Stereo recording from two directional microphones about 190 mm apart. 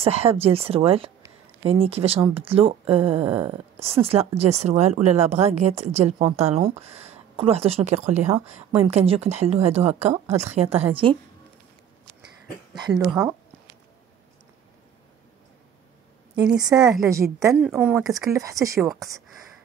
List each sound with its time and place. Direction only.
0.0 s speech: 30° right (ahead or behind)
12.7 s speech: 20° right (ahead or behind)
13.0 s speech: 5° right (ahead or behind)
16.7 s speech: centre (ahead or behind)
17.1 s speech: 15° right (ahead or behind)
17.6 s speech: 5° right (ahead or behind)
18.1 s speech: 15° right (ahead or behind)